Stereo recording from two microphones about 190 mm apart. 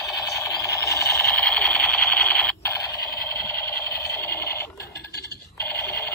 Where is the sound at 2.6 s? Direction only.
15° left (ahead or behind).